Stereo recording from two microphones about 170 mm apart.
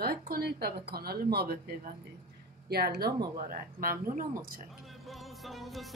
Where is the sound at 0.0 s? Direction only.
65° right (ahead or behind).